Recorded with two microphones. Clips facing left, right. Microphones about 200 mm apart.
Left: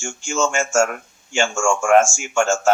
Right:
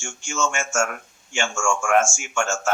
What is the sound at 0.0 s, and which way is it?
Speech, 30° left (ahead or behind).